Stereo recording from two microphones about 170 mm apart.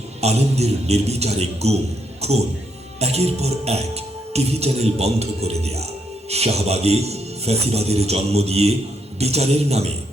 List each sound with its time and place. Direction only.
0.2 s music: 40° right (ahead or behind)
2.2 s speech: 40° right (ahead or behind)
3.0 s music: 40° right (ahead or behind)